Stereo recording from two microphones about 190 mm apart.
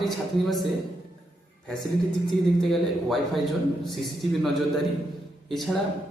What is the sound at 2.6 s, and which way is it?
Speech, centre (ahead or behind).